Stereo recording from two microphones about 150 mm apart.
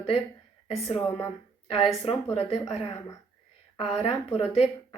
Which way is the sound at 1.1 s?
15° left (ahead or behind).